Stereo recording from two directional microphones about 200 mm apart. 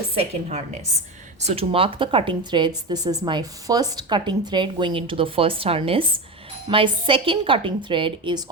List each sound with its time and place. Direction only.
0.1 s a woman's voice: 30° right (ahead or behind)